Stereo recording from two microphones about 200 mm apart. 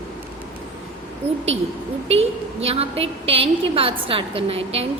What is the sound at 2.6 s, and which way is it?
A woman's voice, 30° right (ahead or behind).